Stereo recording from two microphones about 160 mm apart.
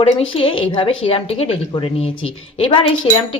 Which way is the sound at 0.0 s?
35° left (ahead or behind).